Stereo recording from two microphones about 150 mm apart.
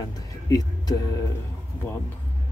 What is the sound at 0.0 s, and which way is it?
Vehicle, 25° left (ahead or behind).